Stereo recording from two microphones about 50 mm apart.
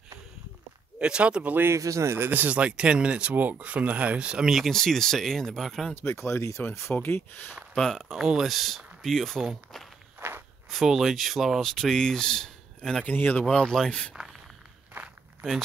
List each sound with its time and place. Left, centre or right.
0.9 s speech: right
1.7 s speech: right
2.1 s speech: right
2.4 s speech: right
4.5 s speech: centre
4.7 s speech: centre
5.9 s speech: left
7.0 s speech: left
7.7 s speech: centre
8.1 s speech: centre
11.7 s speech: centre
13.0 s speech: left
13.5 s speech: centre